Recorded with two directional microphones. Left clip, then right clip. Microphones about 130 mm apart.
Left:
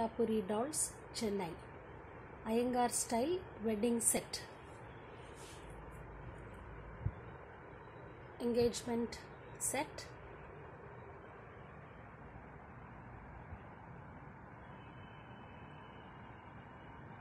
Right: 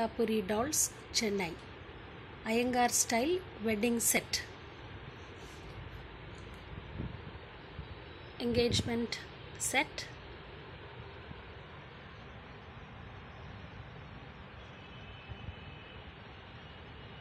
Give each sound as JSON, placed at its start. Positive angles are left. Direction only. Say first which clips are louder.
{"t": 0.0, "sound": "a woman's voice", "louder": "right 3 dB", "side_deg": -15}
{"t": 8.4, "sound": "a woman's voice", "louder": "right 3 dB", "side_deg": -15}